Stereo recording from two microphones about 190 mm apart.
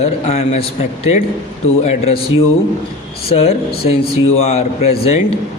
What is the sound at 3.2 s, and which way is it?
A man's voice, 30° left (ahead or behind).